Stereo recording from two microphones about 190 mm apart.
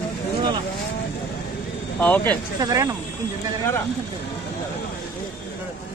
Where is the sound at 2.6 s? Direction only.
20° right (ahead or behind).